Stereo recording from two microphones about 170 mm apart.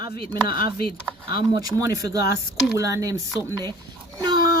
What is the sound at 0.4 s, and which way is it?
Speech, 30° right (ahead or behind).